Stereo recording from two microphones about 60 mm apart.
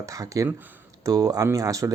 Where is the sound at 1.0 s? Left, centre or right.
Right.